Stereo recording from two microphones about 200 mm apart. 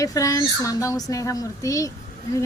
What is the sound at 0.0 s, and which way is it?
A woman's voice, 15° left (ahead or behind).